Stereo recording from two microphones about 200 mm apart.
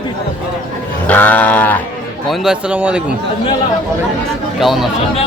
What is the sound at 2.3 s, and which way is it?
Speech, 5° right (ahead or behind).